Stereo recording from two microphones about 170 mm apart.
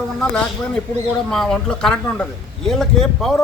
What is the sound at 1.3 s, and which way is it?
A man's voice, 5° left (ahead or behind).